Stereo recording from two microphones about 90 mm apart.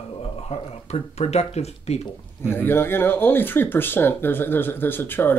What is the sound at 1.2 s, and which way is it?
Speech, 90° left.